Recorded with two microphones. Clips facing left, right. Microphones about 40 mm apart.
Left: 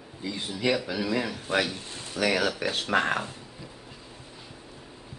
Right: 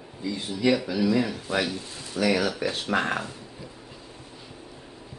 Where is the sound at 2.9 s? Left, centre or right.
Centre.